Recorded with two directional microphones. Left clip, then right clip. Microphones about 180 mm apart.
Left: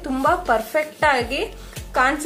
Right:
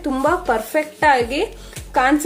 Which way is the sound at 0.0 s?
25° right (ahead or behind).